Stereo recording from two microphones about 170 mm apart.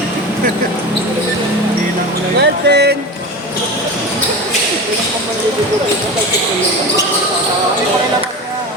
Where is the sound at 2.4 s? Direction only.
75° right (ahead or behind).